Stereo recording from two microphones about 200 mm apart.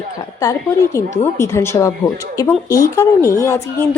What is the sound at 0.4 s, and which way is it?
A woman's voice, 15° left (ahead or behind).